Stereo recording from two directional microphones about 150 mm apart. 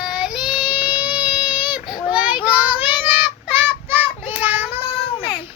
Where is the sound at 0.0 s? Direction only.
5° right (ahead or behind).